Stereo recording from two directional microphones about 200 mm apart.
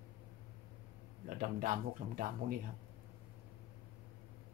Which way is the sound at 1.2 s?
45° right (ahead or behind).